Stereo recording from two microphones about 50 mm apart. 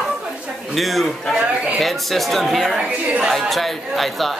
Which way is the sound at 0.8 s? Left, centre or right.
Centre.